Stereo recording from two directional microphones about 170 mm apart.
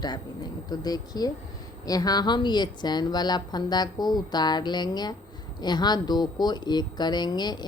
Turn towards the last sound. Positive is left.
turn(degrees=25)  # may be behind; listen again after turning